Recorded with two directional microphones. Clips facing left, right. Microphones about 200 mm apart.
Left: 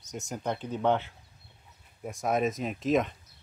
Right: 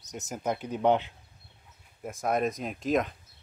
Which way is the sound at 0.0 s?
Centre (ahead or behind).